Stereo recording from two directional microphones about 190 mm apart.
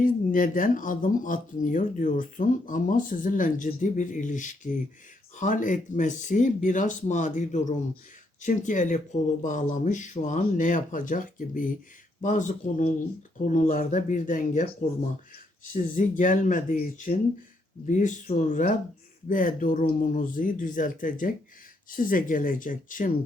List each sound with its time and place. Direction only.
0.0 s speech: 45° left (ahead or behind)
15.7 s speech: 45° left (ahead or behind)